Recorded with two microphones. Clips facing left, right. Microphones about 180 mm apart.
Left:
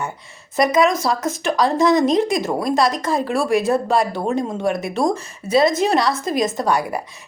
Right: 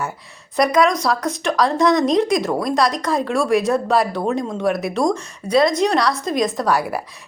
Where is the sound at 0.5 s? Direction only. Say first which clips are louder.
Even; centre (ahead or behind).